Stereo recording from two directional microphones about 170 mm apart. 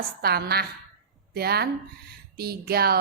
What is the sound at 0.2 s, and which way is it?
A woman's voice, 65° right (ahead or behind).